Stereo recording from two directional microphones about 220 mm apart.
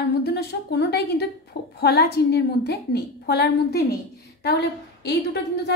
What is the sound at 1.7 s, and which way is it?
A woman's voice, 45° left (ahead or behind).